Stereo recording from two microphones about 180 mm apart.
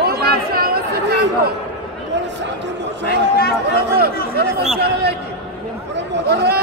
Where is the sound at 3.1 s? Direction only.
60° left (ahead or behind).